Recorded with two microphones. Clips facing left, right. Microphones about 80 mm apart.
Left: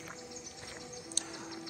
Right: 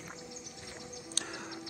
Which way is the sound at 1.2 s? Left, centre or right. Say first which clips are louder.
Right 5 dB; right.